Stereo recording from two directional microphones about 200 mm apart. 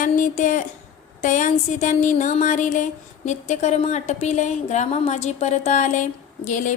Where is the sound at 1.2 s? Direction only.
40° left (ahead or behind).